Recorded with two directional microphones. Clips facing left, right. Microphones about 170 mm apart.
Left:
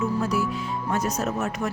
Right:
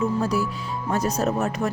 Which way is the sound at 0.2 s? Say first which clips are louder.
Right 1 dB; 35° right (ahead or behind).